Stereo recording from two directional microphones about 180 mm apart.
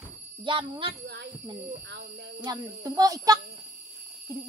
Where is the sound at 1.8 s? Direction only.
70° right (ahead or behind).